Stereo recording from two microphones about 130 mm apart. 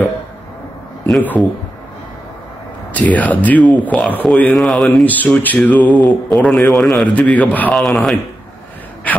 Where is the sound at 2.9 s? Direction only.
10° left (ahead or behind).